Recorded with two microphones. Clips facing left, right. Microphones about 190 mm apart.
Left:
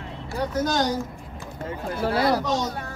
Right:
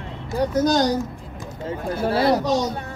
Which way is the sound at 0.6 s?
35° right (ahead or behind).